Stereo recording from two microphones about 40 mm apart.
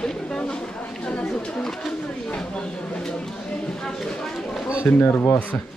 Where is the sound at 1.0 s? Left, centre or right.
Left.